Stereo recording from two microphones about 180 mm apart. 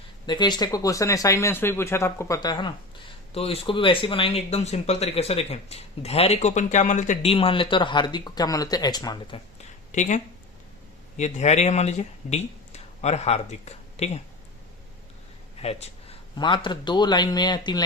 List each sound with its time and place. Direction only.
0.3 s speech: 25° left (ahead or behind)
9.9 s speech: 40° left (ahead or behind)
11.2 s speech: 40° left (ahead or behind)
15.6 s speech: 35° left (ahead or behind)